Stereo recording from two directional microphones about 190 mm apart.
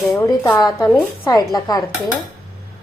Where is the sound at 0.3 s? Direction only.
20° left (ahead or behind).